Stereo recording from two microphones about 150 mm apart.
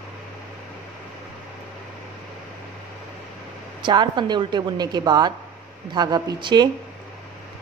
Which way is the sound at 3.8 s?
30° right (ahead or behind).